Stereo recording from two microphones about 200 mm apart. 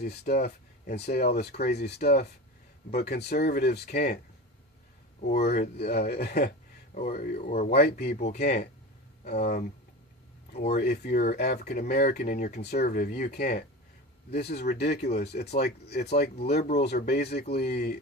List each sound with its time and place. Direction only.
0.0 s speech: 50° left (ahead or behind)
5.4 s speech: 50° left (ahead or behind)
10.8 s speech: 50° left (ahead or behind)